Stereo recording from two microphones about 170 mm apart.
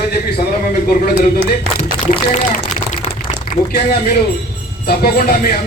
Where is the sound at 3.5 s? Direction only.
65° left (ahead or behind).